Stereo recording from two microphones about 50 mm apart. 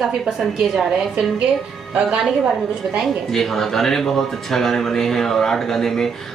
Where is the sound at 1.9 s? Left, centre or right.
Right.